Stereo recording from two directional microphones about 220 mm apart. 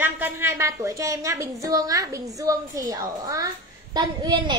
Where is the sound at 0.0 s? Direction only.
10° right (ahead or behind).